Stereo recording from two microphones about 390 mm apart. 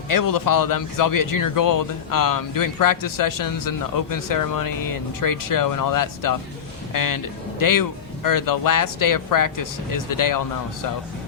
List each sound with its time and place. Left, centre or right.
0.1 s speech: left